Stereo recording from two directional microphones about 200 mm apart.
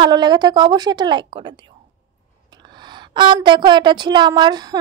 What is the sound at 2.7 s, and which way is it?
Speech, 20° right (ahead or behind).